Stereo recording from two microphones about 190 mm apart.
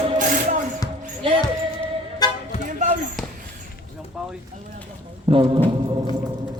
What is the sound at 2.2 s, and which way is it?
Music, 20° left (ahead or behind).